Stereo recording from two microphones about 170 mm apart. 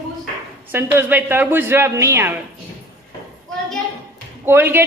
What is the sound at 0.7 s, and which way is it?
A man's voice, 15° right (ahead or behind).